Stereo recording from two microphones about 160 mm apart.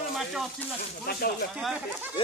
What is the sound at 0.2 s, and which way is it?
Speech, centre (ahead or behind).